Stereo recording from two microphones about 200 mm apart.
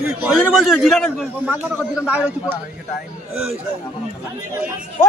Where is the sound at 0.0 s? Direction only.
5° right (ahead or behind).